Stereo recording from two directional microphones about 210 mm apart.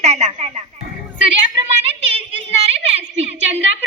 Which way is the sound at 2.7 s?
30° right (ahead or behind).